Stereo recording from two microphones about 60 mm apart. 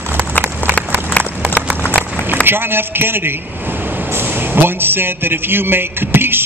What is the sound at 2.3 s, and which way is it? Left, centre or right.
A man's voice, right.